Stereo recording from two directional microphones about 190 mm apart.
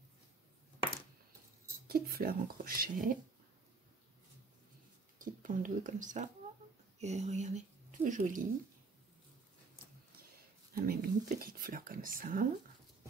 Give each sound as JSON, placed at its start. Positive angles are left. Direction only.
{"t": 1.9, "sound": "speech", "side_deg": -50}
{"t": 5.2, "sound": "speech", "side_deg": -45}
{"t": 10.7, "sound": "speech", "side_deg": -50}